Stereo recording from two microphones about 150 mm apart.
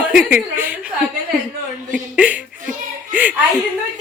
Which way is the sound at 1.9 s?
10° right (ahead or behind).